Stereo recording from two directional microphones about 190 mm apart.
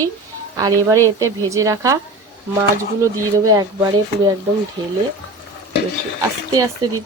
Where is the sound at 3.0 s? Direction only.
20° right (ahead or behind).